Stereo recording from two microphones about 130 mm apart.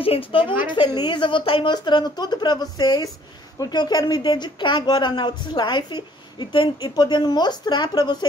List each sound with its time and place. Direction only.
0.0 s a woman's voice: 45° left (ahead or behind)
0.7 s a woman's voice: 35° left (ahead or behind)